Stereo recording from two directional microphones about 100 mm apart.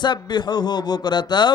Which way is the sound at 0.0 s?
50° left (ahead or behind).